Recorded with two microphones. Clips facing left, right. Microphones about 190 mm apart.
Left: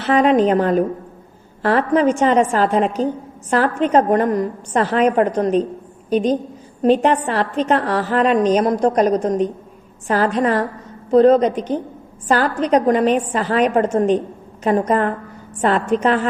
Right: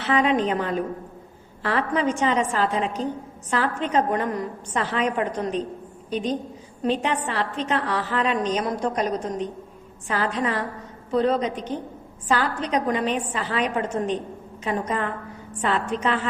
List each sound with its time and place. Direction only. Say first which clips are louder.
0.0 s a woman's voice: left 7 dB; 45° left (ahead or behind)
6.8 s a woman's voice: left 9 dB; 45° left (ahead or behind)